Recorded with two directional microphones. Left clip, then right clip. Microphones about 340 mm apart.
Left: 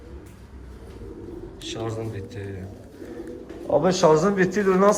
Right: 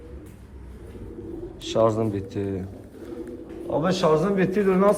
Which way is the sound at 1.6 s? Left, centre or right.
Centre.